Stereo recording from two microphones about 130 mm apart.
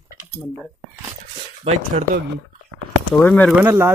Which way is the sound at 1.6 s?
50° right (ahead or behind).